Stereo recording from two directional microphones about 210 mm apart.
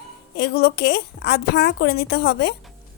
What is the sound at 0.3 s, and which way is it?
Speech, 50° left (ahead or behind).